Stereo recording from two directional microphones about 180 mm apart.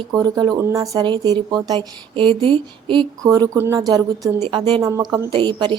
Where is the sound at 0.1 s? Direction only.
20° right (ahead or behind).